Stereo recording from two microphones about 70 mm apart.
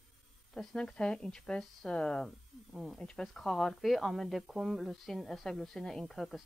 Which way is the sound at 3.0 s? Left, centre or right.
Centre.